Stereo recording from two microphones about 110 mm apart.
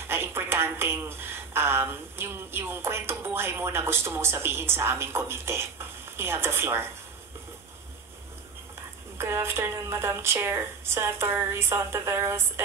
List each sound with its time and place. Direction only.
0.1 s a woman's voice: 20° right (ahead or behind)
9.2 s a woman's voice: 25° right (ahead or behind)